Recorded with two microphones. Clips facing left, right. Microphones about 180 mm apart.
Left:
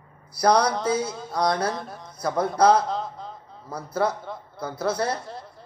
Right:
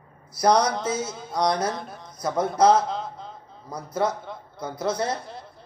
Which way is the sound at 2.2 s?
25° right (ahead or behind).